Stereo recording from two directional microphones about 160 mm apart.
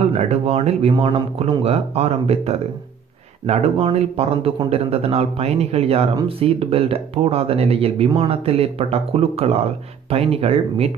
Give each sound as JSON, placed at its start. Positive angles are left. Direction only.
{"t": 0.0, "sound": "a man's voice", "side_deg": -40}